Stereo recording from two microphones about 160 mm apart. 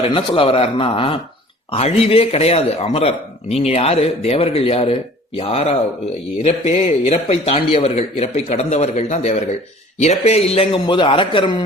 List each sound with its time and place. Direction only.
0.0 s speech: 35° left (ahead or behind)